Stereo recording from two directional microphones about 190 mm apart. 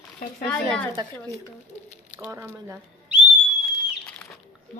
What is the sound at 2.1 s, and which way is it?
Speech, 10° right (ahead or behind).